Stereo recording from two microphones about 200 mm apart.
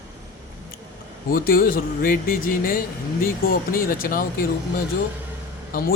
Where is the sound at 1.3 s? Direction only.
45° left (ahead or behind).